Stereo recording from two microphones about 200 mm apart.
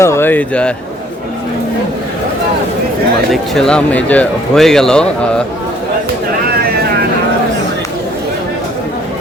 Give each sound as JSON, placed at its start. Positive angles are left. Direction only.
{"t": 0.0, "sound": "speech", "side_deg": 10}
{"t": 3.5, "sound": "speech", "side_deg": 5}
{"t": 6.6, "sound": "vehicle", "side_deg": -50}